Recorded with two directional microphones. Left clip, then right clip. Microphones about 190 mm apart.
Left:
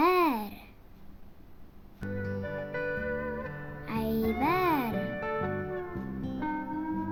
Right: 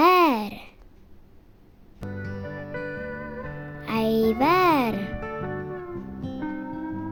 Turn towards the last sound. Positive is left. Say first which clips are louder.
# right 1 dB
turn(degrees=0)  # may be behind; listen again after turning